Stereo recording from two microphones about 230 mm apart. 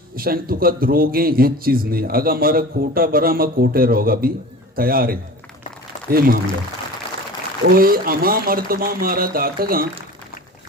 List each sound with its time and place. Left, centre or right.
0.2 s a man's voice: right
7.8 s a man's voice: right